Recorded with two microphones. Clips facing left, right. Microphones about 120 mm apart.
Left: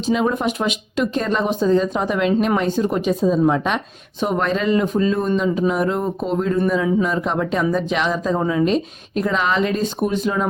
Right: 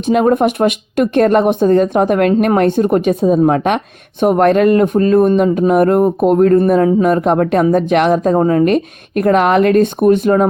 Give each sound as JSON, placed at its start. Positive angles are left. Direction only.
{"t": 0.1, "sound": "speech", "side_deg": -55}